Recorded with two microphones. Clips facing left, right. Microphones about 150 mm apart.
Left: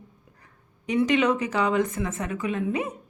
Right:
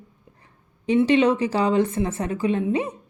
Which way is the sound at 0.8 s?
30° right (ahead or behind).